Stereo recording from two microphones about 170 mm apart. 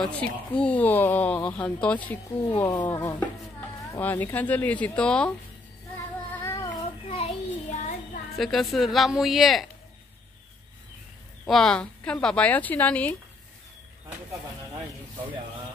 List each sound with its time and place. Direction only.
0.0 s speech: 5° left (ahead or behind)
6.3 s child singing: 15° left (ahead or behind)
7.1 s child singing: 35° left (ahead or behind)
8.4 s speech: centre (ahead or behind)
11.4 s speech: 5° left (ahead or behind)